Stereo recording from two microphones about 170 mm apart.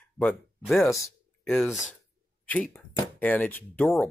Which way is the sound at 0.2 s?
5° left (ahead or behind).